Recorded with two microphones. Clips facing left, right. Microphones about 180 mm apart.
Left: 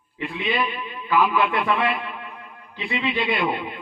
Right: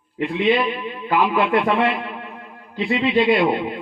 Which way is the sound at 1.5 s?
30° right (ahead or behind).